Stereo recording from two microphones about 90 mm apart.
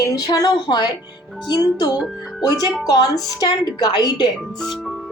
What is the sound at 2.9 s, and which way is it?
Speech, 45° left (ahead or behind).